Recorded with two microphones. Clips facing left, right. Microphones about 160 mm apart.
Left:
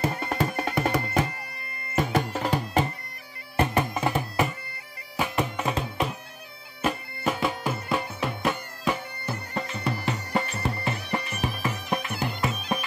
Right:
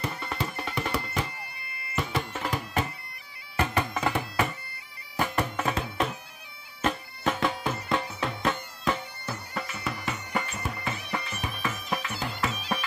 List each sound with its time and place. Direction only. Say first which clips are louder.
0.0 s music: left 6 dB; 50° left (ahead or behind); by 4.5 s 15° left (ahead or behind)
5.1 s bagpipes: left 1 dB; 10° left (ahead or behind)
6.8 s bagpipes: left 1 dB; 10° left (ahead or behind)
9.5 s music: left 5 dB; 25° left (ahead or behind)
10.9 s music: left 4 dB; 20° left (ahead or behind)